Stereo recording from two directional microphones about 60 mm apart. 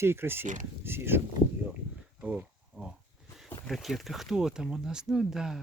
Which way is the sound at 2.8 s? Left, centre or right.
Right.